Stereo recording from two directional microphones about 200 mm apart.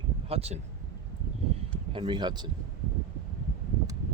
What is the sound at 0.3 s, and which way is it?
Speech, 30° right (ahead or behind).